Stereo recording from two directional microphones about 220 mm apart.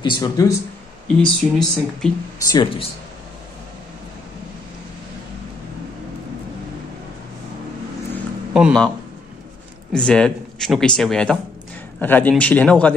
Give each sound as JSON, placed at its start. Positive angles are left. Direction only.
{"t": 0.0, "sound": "a man's voice", "side_deg": 15}
{"t": 1.0, "sound": "speech", "side_deg": 5}
{"t": 2.5, "sound": "speech", "side_deg": 25}
{"t": 8.5, "sound": "speech", "side_deg": 0}
{"t": 9.9, "sound": "a man's voice", "side_deg": 5}